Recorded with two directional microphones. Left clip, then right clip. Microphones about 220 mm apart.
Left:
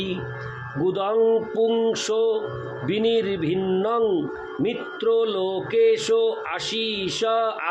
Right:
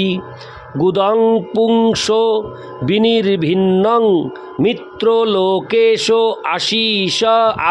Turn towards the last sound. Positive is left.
turn(degrees=-50)  # may be behind; listen again after turning